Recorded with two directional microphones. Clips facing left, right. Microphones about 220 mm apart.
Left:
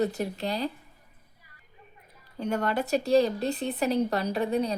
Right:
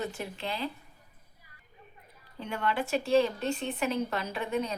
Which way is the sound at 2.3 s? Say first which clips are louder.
Left 4 dB; 40° left (ahead or behind).